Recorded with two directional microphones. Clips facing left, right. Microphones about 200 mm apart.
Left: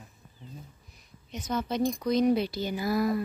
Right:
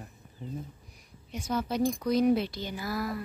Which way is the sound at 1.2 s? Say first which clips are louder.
Even; 10° right (ahead or behind).